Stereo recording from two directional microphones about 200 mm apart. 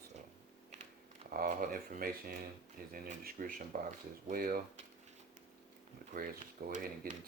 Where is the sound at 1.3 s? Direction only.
45° right (ahead or behind).